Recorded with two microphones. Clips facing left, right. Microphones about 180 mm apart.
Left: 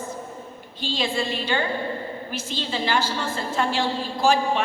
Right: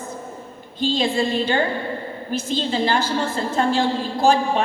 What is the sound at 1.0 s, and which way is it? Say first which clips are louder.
Speech: right 4 dB; 40° right (ahead or behind).